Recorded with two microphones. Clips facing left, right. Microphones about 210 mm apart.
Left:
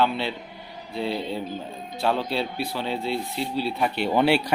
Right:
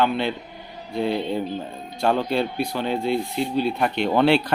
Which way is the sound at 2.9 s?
50° right (ahead or behind).